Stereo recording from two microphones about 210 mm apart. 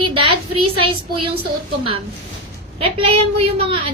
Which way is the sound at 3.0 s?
25° right (ahead or behind).